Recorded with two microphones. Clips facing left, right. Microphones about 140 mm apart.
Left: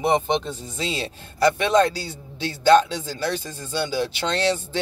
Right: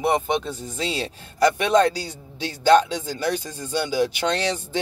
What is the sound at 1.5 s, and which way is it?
Speech, 15° right (ahead or behind).